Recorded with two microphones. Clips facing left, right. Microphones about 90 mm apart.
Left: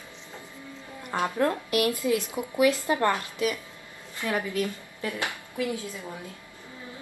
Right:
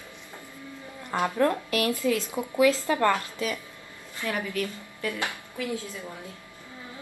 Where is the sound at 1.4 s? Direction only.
20° left (ahead or behind).